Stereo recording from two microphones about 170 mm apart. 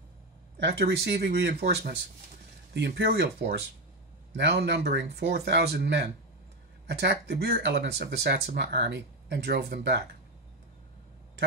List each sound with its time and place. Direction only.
0.6 s speech: 75° right (ahead or behind)
2.7 s speech: 85° right
4.4 s speech: 90° right